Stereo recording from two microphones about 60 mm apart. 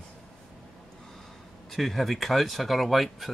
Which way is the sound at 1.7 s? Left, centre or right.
Centre.